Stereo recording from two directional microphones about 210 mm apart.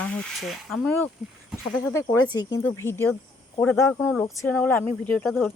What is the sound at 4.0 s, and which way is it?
Speech, centre (ahead or behind).